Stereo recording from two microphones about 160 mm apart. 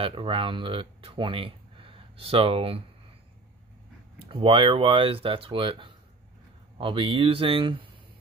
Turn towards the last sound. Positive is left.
turn(degrees=-35)  # may be behind; listen again after turning